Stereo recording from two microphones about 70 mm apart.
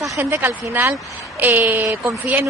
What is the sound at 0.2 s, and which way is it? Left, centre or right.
Speech, right.